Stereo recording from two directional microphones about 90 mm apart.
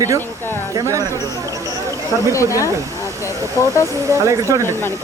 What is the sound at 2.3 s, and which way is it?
Speech, 35° left (ahead or behind).